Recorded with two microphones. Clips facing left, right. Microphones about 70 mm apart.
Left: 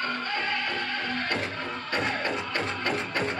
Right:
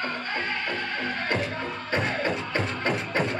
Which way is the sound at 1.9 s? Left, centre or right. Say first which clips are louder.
Right 2 dB; right.